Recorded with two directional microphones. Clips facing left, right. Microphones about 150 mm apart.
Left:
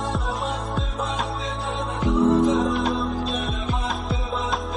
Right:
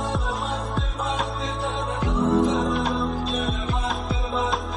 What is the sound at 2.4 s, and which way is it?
Music, centre (ahead or behind).